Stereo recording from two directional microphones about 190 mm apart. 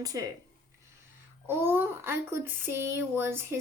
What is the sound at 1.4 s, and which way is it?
Speech, 10° right (ahead or behind).